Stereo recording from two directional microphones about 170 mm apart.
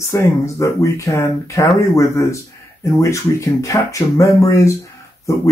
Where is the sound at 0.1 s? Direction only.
20° left (ahead or behind).